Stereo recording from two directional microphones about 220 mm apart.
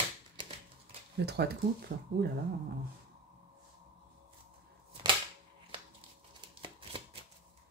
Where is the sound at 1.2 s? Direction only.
50° right (ahead or behind).